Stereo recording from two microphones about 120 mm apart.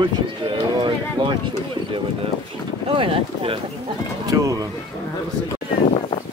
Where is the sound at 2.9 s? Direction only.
50° right (ahead or behind).